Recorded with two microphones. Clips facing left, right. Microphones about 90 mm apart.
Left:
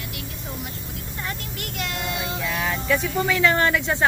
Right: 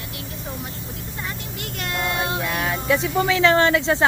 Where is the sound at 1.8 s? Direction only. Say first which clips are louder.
Right 4 dB; 50° right (ahead or behind).